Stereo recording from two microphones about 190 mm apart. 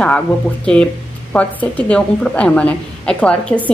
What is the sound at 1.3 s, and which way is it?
A woman's voice, 5° left (ahead or behind).